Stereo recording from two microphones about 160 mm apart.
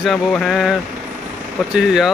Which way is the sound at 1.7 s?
5° right (ahead or behind).